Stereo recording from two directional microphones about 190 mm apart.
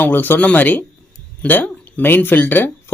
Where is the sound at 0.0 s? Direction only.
10° left (ahead or behind).